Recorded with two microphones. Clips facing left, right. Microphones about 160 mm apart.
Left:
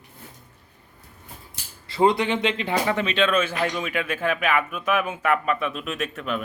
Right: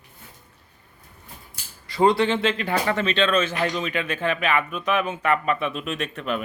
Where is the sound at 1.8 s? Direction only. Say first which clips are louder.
Right 1 dB; 20° left (ahead or behind).